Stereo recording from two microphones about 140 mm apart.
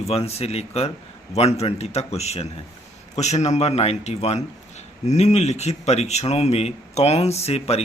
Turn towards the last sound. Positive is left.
turn(degrees=50)  # may be behind; listen again after turning